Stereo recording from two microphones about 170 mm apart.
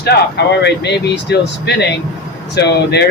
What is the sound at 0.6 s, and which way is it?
Speech, 90° left.